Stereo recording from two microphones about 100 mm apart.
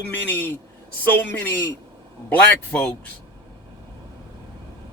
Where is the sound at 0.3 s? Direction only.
15° left (ahead or behind).